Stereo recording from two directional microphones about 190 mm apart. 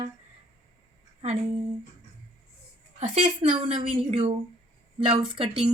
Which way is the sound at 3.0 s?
35° right (ahead or behind).